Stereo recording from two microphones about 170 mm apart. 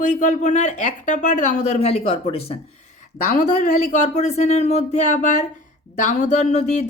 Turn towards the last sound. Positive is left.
turn(degrees=40)  # may be behind; listen again after turning